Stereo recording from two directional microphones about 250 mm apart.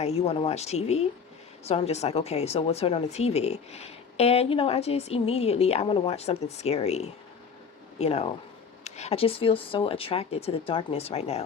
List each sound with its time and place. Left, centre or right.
0.0 s speech: left